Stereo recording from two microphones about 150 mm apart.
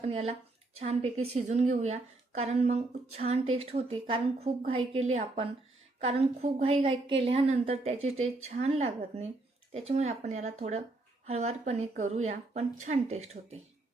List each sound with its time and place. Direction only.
0.0 s a woman's voice: 45° right (ahead or behind)